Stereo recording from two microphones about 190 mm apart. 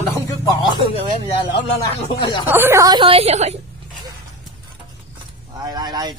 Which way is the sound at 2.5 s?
10° right (ahead or behind).